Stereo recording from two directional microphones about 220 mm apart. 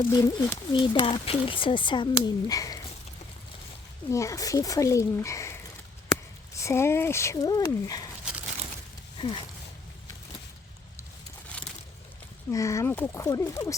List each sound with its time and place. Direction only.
0.0 s speech: 15° left (ahead or behind)
4.1 s speech: 15° left (ahead or behind)
6.6 s speech: 10° left (ahead or behind)
9.1 s speech: 20° left (ahead or behind)
12.5 s speech: 15° left (ahead or behind)